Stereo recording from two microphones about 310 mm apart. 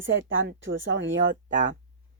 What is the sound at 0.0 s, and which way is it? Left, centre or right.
Speech, right.